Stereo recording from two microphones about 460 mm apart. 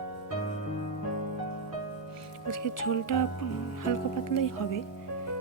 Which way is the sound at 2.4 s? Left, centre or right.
Left.